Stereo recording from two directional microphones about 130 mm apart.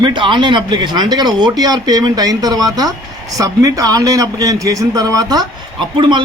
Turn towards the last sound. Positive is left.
turn(degrees=-40)  # may be behind; listen again after turning